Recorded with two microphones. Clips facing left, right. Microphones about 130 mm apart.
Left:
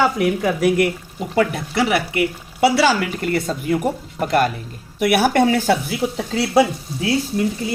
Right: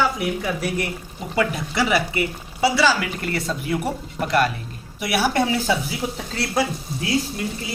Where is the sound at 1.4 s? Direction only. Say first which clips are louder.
Left 3 dB; 60° left (ahead or behind).